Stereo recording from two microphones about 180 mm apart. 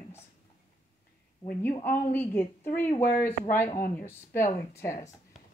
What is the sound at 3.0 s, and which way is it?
Speech, 50° left (ahead or behind).